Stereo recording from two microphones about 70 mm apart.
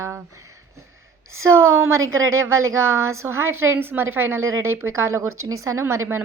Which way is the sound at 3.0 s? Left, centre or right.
Right.